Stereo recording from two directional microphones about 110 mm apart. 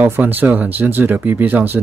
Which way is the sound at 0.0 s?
15° right (ahead or behind).